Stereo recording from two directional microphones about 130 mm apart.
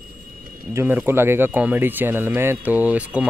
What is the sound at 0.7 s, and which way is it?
Speech, 15° right (ahead or behind).